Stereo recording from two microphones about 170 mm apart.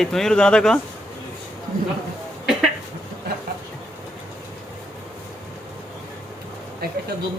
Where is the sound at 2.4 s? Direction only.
Centre (ahead or behind).